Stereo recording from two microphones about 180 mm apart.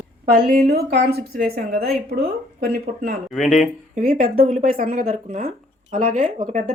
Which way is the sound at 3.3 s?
Centre (ahead or behind).